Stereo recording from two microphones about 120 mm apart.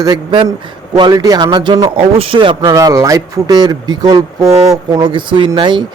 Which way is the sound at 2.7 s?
30° right (ahead or behind).